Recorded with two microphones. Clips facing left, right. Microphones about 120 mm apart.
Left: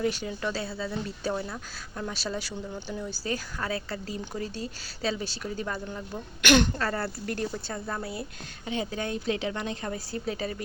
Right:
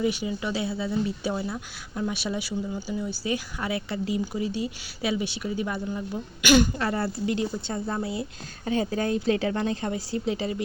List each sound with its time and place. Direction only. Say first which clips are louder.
0.0 s a woman's voice: right 2 dB; 10° right (ahead or behind)
6.7 s speech: right 3 dB; 15° right (ahead or behind)
8.6 s a woman's voice: right 6 dB; 40° right (ahead or behind)